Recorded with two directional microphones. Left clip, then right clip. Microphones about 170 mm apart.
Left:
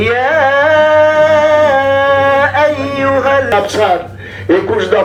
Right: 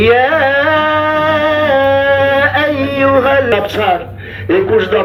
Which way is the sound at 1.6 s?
30° right (ahead or behind).